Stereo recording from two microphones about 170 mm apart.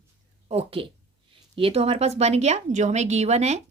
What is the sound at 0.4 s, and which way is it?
Speech, 35° right (ahead or behind).